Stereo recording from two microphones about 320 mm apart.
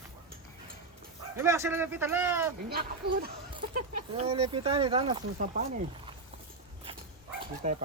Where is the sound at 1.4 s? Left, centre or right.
Centre.